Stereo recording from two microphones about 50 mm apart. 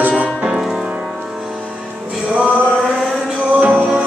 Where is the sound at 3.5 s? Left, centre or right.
Right.